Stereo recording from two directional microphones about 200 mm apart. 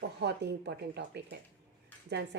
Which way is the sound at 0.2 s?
55° right (ahead or behind).